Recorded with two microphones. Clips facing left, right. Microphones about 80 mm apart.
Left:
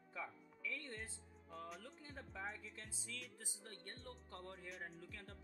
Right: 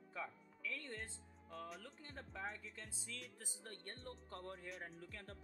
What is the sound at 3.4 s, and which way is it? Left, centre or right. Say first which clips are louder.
Speech: right 2 dB; right.